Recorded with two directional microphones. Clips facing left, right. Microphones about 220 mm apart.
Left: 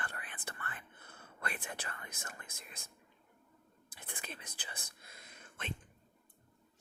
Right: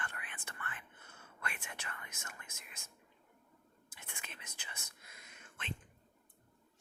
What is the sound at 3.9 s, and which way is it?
Whispering, 35° left (ahead or behind).